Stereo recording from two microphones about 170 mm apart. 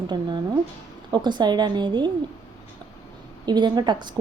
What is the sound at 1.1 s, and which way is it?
Speech, 25° right (ahead or behind).